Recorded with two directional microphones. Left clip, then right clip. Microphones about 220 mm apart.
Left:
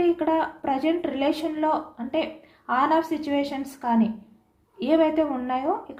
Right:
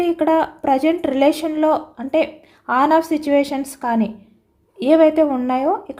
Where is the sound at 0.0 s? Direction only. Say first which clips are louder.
Right 6 dB; 50° right (ahead or behind).